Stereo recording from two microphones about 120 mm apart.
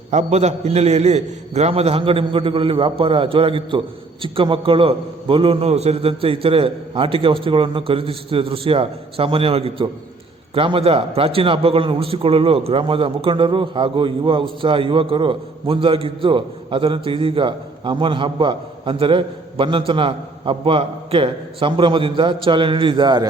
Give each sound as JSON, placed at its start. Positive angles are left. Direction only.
{"t": 0.1, "sound": "a man's voice", "side_deg": -75}